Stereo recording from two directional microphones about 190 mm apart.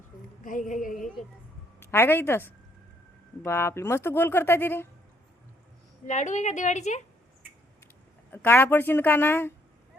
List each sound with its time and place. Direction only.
0.4 s a sound: 45° left (ahead or behind)
1.8 s speech: 10° left (ahead or behind)
6.1 s a woman's voice: 40° left (ahead or behind)
8.3 s speech: 10° left (ahead or behind)